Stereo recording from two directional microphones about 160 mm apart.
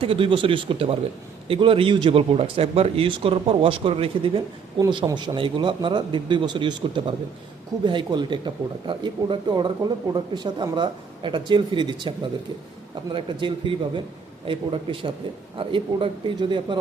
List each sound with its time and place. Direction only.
0.0 s a man's voice: 35° right (ahead or behind)